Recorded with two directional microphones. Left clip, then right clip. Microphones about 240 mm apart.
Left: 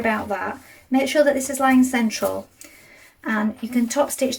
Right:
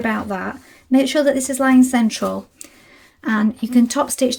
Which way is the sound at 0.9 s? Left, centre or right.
Right.